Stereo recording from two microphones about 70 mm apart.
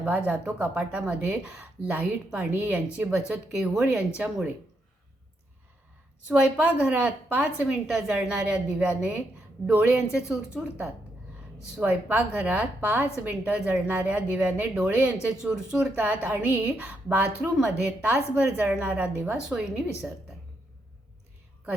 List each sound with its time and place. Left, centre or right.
0.0 s a woman's voice: right
6.2 s a woman's voice: centre
11.8 s a woman's voice: right
16.0 s a woman's voice: right
19.4 s a woman's voice: centre